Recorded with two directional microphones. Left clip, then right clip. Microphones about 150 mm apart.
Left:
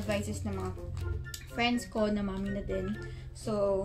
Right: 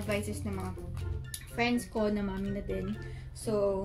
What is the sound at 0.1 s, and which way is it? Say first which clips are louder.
A woman's voice: even; 15° left (ahead or behind).